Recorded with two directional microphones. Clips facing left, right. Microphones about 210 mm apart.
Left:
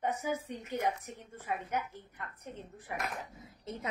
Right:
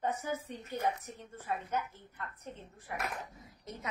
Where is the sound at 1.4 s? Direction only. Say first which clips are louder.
Even; 15° left (ahead or behind).